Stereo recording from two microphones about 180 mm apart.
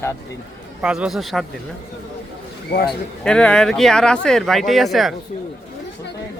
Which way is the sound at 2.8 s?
5° left (ahead or behind).